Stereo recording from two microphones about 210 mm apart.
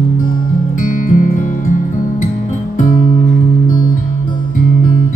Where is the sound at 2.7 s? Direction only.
40° left (ahead or behind).